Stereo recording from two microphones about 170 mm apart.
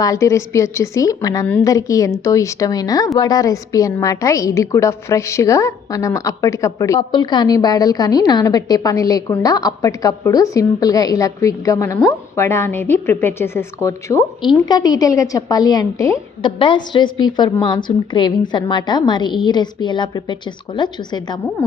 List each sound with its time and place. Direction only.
0.0 s a woman's voice: 20° left (ahead or behind)
16.6 s a woman's voice: 30° left (ahead or behind)